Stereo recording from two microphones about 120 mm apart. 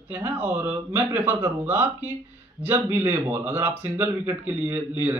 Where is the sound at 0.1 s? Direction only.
15° right (ahead or behind).